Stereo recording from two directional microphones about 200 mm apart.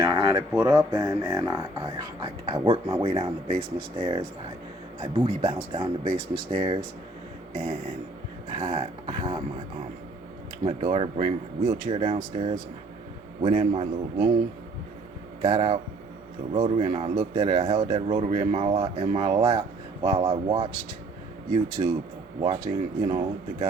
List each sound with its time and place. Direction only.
0.0 s speech: 15° right (ahead or behind)
8.5 s speech: 25° right (ahead or behind)
10.6 s a man's voice: 25° right (ahead or behind)
15.4 s speech: 25° right (ahead or behind)
21.8 s a man's voice: 30° right (ahead or behind)
22.4 s speech: 20° right (ahead or behind)